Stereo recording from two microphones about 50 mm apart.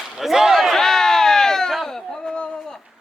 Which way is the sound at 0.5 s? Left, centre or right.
Centre.